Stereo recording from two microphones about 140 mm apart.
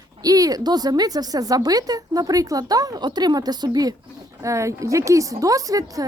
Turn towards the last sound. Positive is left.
turn(degrees=-25)  # may be behind; listen again after turning